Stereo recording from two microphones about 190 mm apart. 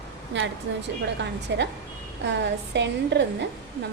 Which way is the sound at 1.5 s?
65° right (ahead or behind).